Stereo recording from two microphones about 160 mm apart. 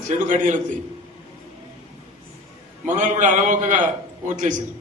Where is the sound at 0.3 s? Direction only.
50° right (ahead or behind).